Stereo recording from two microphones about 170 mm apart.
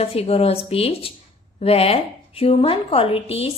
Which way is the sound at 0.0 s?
35° left (ahead or behind).